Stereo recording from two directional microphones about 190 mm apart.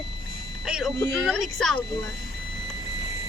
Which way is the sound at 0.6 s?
5° right (ahead or behind).